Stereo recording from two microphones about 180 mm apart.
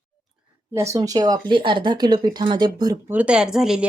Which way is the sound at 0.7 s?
15° right (ahead or behind).